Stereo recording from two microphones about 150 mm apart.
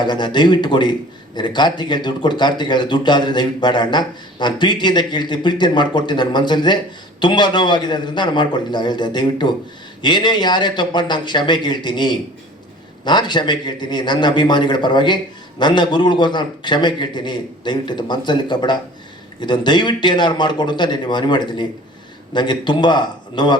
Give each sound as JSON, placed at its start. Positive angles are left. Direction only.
{"t": 0.0, "sound": "a man's voice", "side_deg": 30}